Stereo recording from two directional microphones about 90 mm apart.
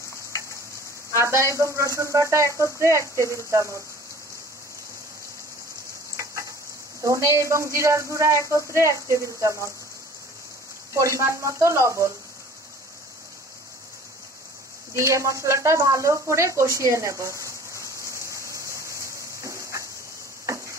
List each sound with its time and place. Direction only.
1.1 s speech: 30° right (ahead or behind)
6.1 s stir: 35° right (ahead or behind)
7.0 s speech: 35° right (ahead or behind)
10.9 s speech: 35° right (ahead or behind)
15.0 s speech: 35° right (ahead or behind)
17.4 s a sound: 35° right (ahead or behind)